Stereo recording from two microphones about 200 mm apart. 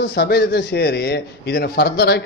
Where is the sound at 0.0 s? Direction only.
55° left (ahead or behind).